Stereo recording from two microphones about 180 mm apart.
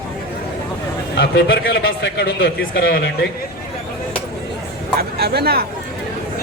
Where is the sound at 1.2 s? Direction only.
70° left (ahead or behind).